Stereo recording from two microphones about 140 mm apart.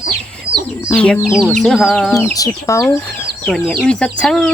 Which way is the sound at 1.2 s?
5° right (ahead or behind).